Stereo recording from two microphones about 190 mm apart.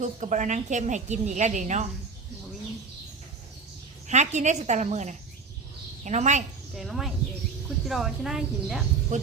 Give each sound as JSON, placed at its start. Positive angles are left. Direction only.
{"t": 0.0, "sound": "a woman's voice", "side_deg": -40}
{"t": 4.1, "sound": "a woman's voice", "side_deg": -40}
{"t": 6.7, "sound": "speech", "side_deg": 0}
{"t": 9.1, "sound": "a woman's voice", "side_deg": -40}